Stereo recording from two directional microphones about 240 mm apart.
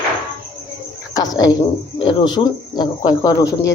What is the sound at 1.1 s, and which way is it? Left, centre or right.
Speech, centre.